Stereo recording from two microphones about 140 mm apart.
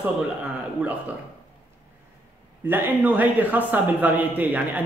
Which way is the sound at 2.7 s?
10° right (ahead or behind).